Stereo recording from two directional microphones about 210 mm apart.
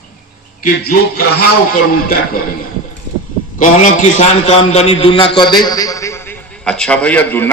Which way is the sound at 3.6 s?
35° left (ahead or behind).